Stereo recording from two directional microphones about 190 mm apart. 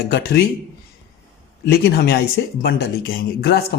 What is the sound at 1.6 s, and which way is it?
Speech, 55° left (ahead or behind).